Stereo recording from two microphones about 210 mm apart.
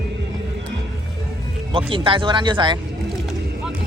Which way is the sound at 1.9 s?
25° right (ahead or behind).